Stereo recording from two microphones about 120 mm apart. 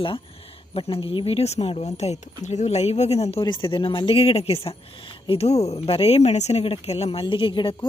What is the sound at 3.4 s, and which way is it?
Speech, 45° left (ahead or behind).